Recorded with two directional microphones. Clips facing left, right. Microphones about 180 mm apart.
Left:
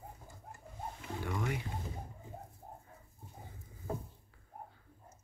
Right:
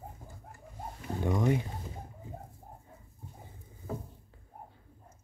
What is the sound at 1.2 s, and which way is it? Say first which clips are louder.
Speech: right 9 dB; 25° right (ahead or behind).